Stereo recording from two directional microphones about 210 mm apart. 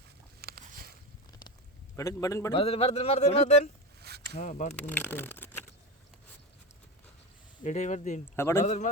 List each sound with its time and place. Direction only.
0.4 s a sound: 45° right (ahead or behind)
2.0 s a man's voice: 15° left (ahead or behind)
2.5 s speech: 30° left (ahead or behind)
4.0 s a sound: 50° right (ahead or behind)
4.4 s speech: 35° left (ahead or behind)
4.7 s speech: 10° left (ahead or behind)
7.6 s speech: 35° left (ahead or behind)
8.4 s a man's voice: 10° left (ahead or behind)
8.6 s speech: 35° left (ahead or behind)